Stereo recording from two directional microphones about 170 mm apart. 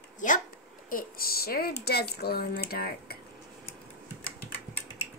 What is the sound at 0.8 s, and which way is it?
Speech, 55° left (ahead or behind).